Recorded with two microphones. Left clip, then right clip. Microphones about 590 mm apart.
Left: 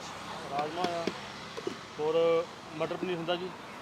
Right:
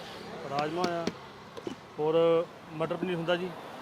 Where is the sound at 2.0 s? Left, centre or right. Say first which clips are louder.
Right 2 dB; right.